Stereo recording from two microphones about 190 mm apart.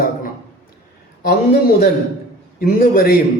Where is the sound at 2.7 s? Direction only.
50° left (ahead or behind).